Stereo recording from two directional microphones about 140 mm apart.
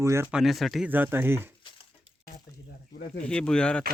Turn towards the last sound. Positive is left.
turn(degrees=5)  # may be behind; listen again after turning